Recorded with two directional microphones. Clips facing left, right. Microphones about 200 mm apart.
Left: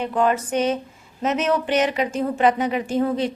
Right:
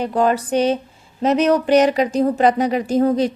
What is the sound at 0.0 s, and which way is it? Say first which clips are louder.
Mantra: right 3 dB; 35° right (ahead or behind).